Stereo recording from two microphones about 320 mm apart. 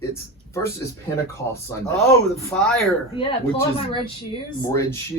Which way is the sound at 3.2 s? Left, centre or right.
Centre.